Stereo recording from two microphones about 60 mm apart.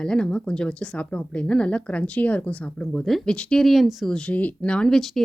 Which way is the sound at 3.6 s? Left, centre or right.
Centre.